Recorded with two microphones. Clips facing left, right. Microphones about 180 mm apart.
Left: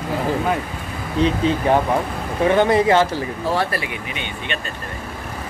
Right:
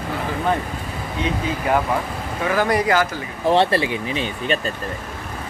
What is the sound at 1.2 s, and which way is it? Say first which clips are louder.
Speech: left 5 dB; 30° left (ahead or behind).